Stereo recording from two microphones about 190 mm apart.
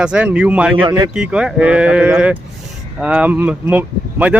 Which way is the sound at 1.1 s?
5° right (ahead or behind).